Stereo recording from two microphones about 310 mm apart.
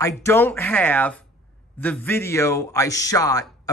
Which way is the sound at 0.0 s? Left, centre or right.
Centre.